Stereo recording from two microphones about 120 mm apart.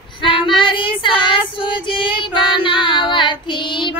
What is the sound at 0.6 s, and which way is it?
Female singing, 45° left (ahead or behind).